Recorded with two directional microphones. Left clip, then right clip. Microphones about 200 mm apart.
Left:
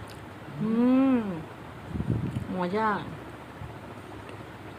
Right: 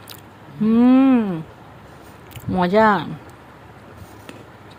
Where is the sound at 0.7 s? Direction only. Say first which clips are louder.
Right 9 dB; 55° right (ahead or behind).